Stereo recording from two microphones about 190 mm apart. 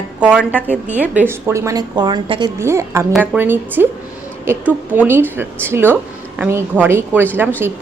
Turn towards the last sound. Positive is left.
turn(degrees=-10)  # may be behind; listen again after turning